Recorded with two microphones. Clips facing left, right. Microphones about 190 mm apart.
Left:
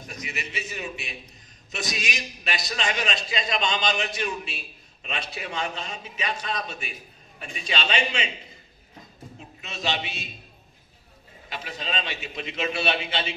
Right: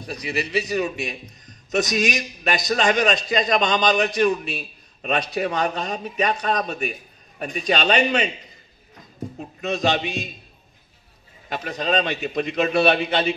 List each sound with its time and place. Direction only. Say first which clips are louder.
0.0 s a man's voice: right 9 dB; 35° right (ahead or behind)
4.2 s a man's voice: right 11 dB; 50° right (ahead or behind)
5.6 s a man's voice: right 8 dB; 40° right (ahead or behind)
6.5 s a man's voice: right 8 dB; 55° right (ahead or behind)
9.4 s a man's voice: right 11 dB; 45° right (ahead or behind)
11.4 s a man's voice: right 9 dB; 50° right (ahead or behind)